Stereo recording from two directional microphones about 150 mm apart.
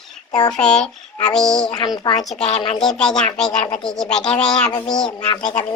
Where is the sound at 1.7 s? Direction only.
30° left (ahead or behind).